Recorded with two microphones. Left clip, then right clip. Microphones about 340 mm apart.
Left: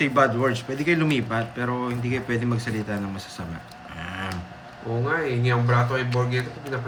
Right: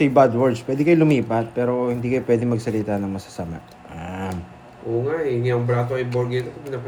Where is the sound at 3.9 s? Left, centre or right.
Centre.